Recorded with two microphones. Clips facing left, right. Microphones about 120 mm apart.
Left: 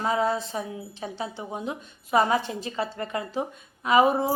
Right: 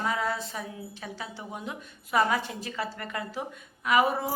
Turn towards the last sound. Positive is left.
turn(degrees=25)  # may be behind; listen again after turning